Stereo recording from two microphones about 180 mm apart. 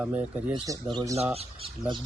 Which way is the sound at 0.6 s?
20° right (ahead or behind).